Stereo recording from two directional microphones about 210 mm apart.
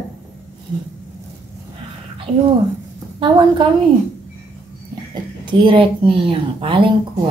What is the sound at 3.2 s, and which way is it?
Speech, 25° right (ahead or behind).